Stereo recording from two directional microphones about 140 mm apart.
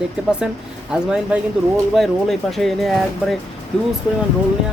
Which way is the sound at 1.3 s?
10° right (ahead or behind).